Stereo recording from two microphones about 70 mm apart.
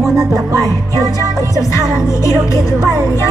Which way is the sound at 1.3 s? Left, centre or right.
Left.